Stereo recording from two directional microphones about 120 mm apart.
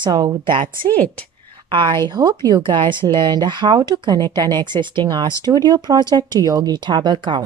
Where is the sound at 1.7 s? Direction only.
40° right (ahead or behind).